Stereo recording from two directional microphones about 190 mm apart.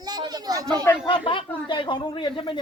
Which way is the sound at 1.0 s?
25° left (ahead or behind).